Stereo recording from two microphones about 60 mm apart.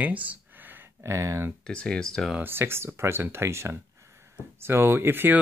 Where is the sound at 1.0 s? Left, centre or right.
Right.